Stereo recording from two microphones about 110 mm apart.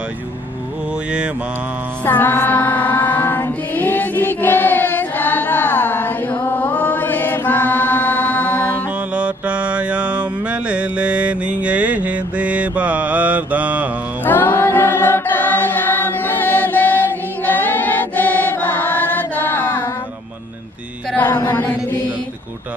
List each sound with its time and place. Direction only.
2.0 s mantra: 20° left (ahead or behind)
9.1 s mantra: 10° right (ahead or behind)
14.2 s chant: 15° left (ahead or behind)
21.5 s chant: 15° left (ahead or behind)